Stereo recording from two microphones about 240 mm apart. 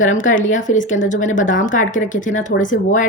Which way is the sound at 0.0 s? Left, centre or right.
Left.